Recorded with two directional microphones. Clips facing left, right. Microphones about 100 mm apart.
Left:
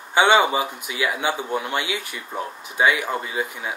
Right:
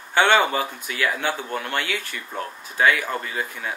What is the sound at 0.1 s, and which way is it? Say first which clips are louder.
Speech: left 2 dB; 15° left (ahead or behind).